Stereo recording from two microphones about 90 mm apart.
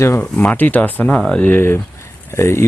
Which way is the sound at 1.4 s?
25° left (ahead or behind).